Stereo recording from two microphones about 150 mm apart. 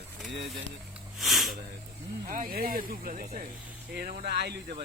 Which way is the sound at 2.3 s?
65° right (ahead or behind).